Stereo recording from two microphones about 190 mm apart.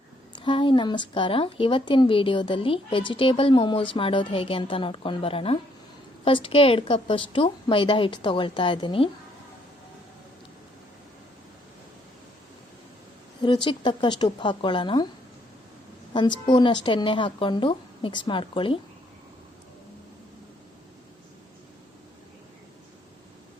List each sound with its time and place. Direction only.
0.3 s a woman's voice: 25° left (ahead or behind)
13.4 s a woman's voice: 25° left (ahead or behind)
16.5 s a woman's voice: 25° left (ahead or behind)